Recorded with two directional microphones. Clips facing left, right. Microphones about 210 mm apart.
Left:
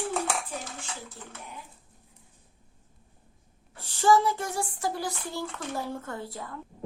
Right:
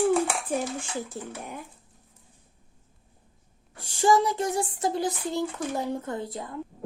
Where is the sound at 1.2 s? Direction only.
50° right (ahead or behind).